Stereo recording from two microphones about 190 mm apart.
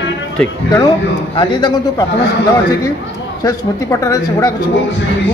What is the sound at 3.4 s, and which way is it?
Speech, 15° left (ahead or behind).